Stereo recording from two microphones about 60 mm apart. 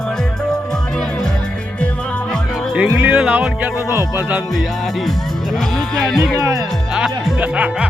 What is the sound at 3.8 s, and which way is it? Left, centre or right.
Speech, right.